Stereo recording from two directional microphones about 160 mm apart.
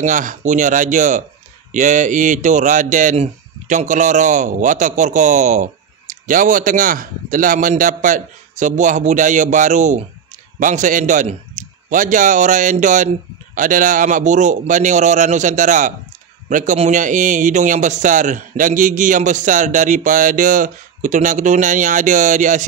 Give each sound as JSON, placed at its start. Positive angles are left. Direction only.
{"t": 0.0, "sound": "speech", "side_deg": -55}